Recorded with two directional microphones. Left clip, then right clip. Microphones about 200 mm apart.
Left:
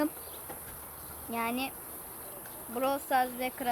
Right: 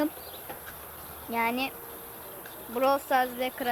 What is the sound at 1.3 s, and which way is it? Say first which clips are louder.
Speech: right 5 dB; 20° right (ahead or behind).